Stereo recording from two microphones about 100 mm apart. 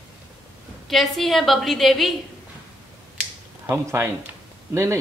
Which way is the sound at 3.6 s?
25° right (ahead or behind).